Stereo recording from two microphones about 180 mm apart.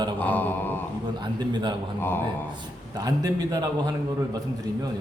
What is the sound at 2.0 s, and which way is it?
Speech, 10° left (ahead or behind).